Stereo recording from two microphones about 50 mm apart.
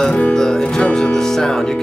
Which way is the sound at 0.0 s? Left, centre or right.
Centre.